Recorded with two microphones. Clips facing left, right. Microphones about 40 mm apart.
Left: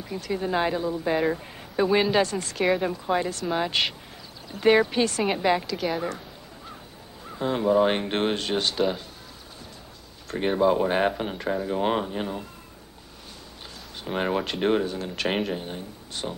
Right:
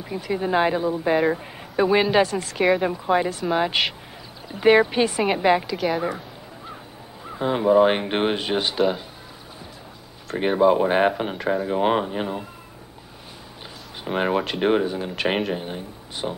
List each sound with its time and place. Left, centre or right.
0.0 s speech: centre
2.8 s speech: centre
7.2 s speech: centre
10.3 s speech: centre
14.0 s speech: centre